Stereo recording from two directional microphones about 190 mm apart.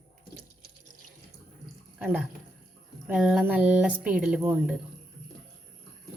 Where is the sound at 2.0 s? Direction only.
10° right (ahead or behind).